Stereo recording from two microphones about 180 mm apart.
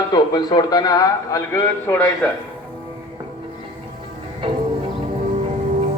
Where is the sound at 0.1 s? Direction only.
25° left (ahead or behind).